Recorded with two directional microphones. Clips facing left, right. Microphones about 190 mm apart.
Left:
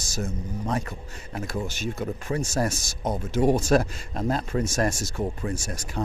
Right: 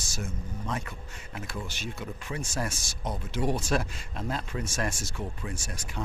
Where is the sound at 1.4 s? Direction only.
40° left (ahead or behind).